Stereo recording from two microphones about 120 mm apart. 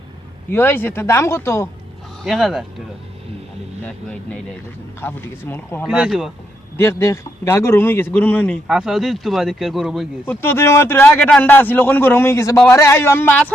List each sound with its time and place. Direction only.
0.5 s a man's voice: 15° left (ahead or behind)
2.2 s speech: 5° right (ahead or behind)
3.8 s a man's voice: 10° left (ahead or behind)
5.9 s speech: 5° right (ahead or behind)
6.7 s a man's voice: 20° left (ahead or behind)
8.6 s speech: 5° right (ahead or behind)
10.2 s a man's voice: 20° left (ahead or behind)